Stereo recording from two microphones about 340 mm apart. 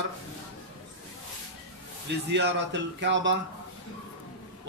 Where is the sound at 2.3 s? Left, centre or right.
Right.